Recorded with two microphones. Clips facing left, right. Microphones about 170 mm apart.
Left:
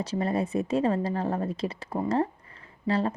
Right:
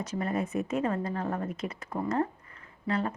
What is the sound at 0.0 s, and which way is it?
Speech, 30° left (ahead or behind).